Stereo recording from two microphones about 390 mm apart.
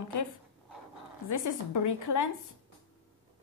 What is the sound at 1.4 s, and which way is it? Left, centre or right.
Speech, left.